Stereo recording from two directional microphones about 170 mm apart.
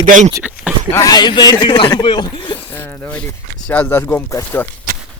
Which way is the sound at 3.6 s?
10° left (ahead or behind).